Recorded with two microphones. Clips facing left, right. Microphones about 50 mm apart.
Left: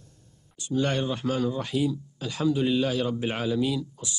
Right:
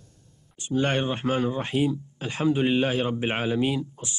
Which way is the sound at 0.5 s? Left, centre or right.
Right.